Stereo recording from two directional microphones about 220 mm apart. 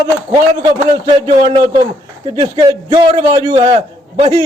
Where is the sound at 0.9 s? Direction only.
20° right (ahead or behind).